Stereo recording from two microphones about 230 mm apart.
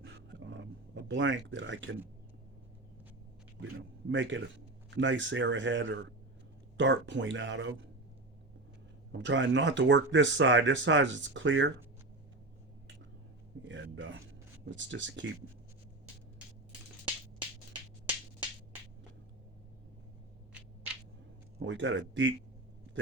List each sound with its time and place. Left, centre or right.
0.0 s a sound: right
3.6 s a man's voice: right
9.1 s speech: right
13.7 s a man's voice: right
21.6 s speech: right